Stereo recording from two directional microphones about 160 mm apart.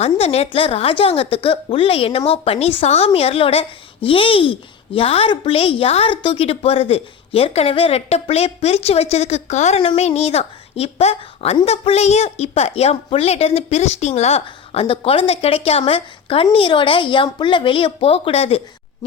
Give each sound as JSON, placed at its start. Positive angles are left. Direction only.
{"t": 0.0, "sound": "a woman's voice", "side_deg": 40}